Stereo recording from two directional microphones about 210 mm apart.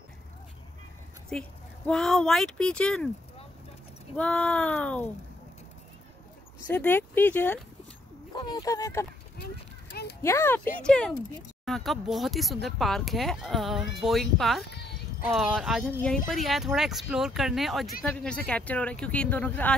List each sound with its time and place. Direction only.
1.3 s speech: 5° left (ahead or behind)
4.2 s speech: 5° left (ahead or behind)
6.7 s speech: 10° left (ahead or behind)
8.4 s speech: 20° left (ahead or behind)
9.8 s a sound: 50° left (ahead or behind)
10.2 s speech: 10° left (ahead or behind)